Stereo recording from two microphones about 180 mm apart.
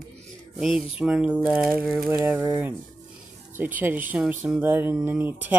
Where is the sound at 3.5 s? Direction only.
10° right (ahead or behind).